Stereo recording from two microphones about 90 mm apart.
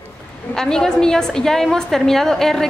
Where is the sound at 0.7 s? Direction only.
5° left (ahead or behind).